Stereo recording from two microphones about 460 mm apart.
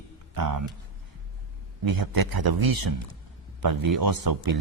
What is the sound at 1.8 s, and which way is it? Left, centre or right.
A man's voice, right.